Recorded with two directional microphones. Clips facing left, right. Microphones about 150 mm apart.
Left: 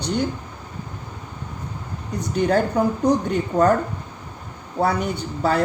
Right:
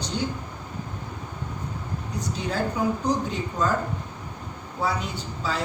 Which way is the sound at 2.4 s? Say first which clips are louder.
Left 9 dB; 65° left (ahead or behind).